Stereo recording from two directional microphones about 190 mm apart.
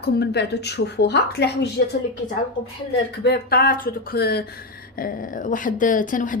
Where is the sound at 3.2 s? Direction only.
55° left (ahead or behind).